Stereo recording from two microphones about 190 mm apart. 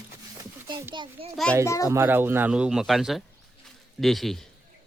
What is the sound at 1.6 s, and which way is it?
Speech, 15° left (ahead or behind).